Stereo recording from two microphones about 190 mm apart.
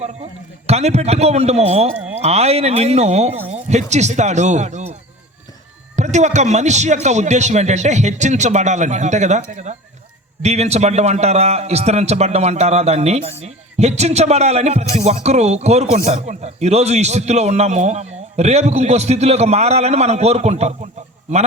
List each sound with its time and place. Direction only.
0.7 s speech: 35° right (ahead or behind)
6.0 s speech: 40° right (ahead or behind)